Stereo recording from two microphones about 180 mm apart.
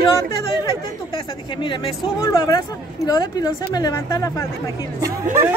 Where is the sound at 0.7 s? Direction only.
25° left (ahead or behind).